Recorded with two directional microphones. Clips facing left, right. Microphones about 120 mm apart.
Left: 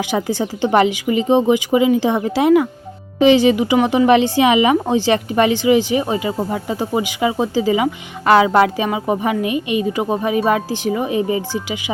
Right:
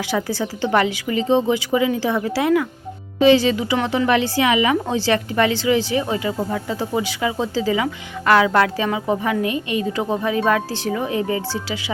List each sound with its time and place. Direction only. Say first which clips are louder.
0.3 s a woman's voice: left 3 dB; 20° left (ahead or behind)